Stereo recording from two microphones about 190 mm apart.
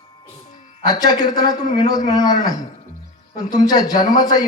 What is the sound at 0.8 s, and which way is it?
A man's voice, 20° left (ahead or behind).